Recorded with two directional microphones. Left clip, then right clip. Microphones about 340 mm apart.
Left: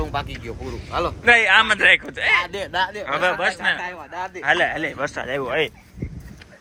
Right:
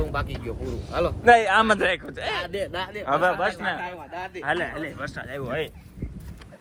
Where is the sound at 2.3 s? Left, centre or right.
Centre.